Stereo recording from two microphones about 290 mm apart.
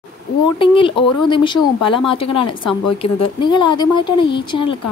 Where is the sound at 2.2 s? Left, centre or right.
Left.